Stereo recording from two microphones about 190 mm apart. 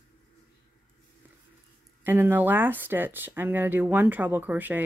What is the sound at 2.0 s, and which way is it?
Speech, 10° right (ahead or behind).